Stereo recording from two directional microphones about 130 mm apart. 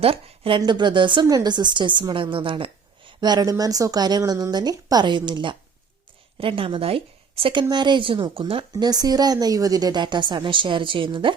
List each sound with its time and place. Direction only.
0.0 s a woman's voice: 45° right (ahead or behind)
7.7 s speech: 35° right (ahead or behind)
8.7 s speech: 30° right (ahead or behind)